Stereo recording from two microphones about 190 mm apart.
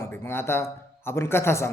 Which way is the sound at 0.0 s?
15° left (ahead or behind).